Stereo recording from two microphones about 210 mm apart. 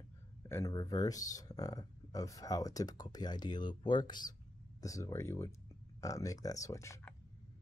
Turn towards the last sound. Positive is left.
turn(degrees=15)  # may be behind; listen again after turning